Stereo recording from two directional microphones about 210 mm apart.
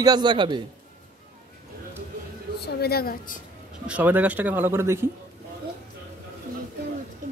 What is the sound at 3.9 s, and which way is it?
Speech, 10° right (ahead or behind).